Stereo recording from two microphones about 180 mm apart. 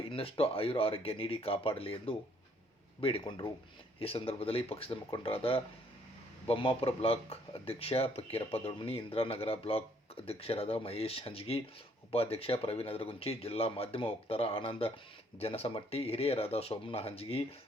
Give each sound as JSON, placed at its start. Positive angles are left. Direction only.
{"t": 0.0, "sound": "speech", "side_deg": 30}